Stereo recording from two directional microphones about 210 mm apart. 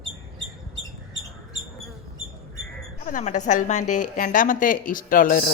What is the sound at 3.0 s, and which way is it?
Speech, 35° left (ahead or behind).